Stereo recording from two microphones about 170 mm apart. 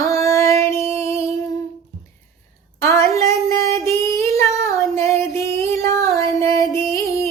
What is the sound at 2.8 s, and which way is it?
Child singing, 20° left (ahead or behind).